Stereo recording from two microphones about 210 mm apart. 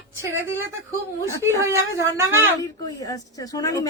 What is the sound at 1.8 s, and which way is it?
Speech, 15° right (ahead or behind).